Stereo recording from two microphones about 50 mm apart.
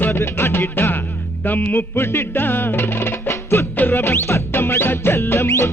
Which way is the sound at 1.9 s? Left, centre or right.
Left.